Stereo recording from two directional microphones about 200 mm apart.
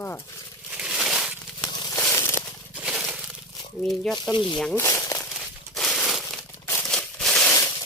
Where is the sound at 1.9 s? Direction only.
10° left (ahead or behind).